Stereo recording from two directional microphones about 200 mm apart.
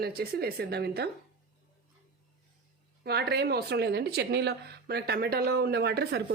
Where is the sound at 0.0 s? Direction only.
50° right (ahead or behind).